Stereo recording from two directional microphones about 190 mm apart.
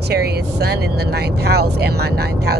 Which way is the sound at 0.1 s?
55° right (ahead or behind).